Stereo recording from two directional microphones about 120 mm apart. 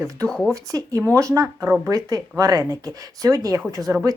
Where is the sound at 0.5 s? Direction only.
30° right (ahead or behind).